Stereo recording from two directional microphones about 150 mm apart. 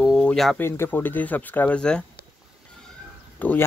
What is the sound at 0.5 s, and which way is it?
Speech, 15° left (ahead or behind).